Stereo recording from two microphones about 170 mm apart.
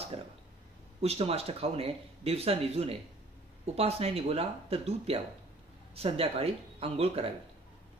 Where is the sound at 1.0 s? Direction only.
35° right (ahead or behind).